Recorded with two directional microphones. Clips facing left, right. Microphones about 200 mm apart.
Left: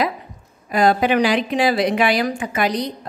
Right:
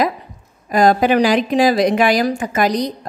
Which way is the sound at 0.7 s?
45° right (ahead or behind).